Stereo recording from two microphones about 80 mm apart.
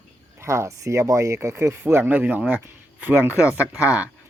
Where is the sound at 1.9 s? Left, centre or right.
Right.